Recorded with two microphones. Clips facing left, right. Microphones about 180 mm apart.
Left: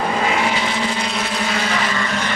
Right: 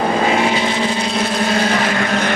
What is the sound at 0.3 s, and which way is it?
Vehicle, 25° right (ahead or behind).